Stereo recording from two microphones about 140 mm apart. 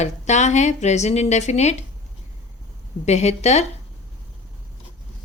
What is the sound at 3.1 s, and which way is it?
Speech, 50° left (ahead or behind).